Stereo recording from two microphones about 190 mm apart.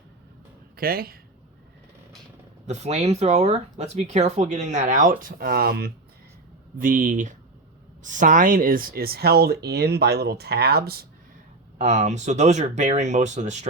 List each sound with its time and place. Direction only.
0.8 s speech: 50° right (ahead or behind)
2.6 s speech: 35° right (ahead or behind); by 5.9 s 55° right (ahead or behind)
6.8 s speech: 45° right (ahead or behind)
11.8 s speech: 40° right (ahead or behind)